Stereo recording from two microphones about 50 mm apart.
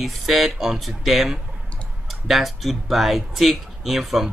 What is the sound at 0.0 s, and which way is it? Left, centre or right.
Speech, centre.